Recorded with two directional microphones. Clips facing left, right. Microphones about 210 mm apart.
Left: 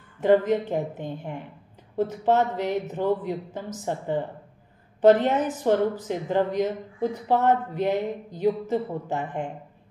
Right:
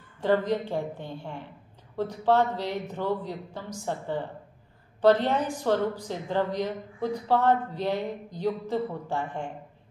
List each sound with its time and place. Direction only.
0.2 s speech: 15° left (ahead or behind)